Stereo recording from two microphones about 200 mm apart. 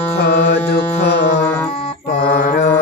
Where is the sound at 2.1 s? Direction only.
50° left (ahead or behind).